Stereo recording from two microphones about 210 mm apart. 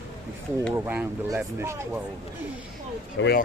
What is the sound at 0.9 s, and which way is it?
Speech, 5° right (ahead or behind).